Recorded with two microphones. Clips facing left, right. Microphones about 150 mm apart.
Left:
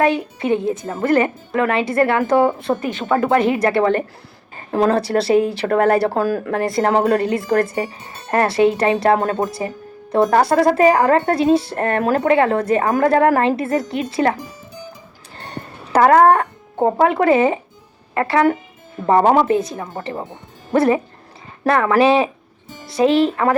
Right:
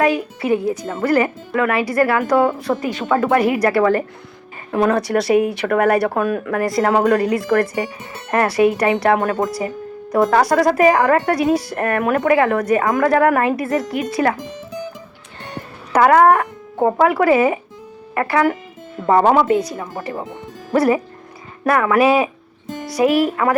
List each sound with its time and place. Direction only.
0.0 s speech: 25° left (ahead or behind)
14.3 s music: 90° right
15.4 s music: 35° left (ahead or behind)
16.7 s speech: 25° left (ahead or behind)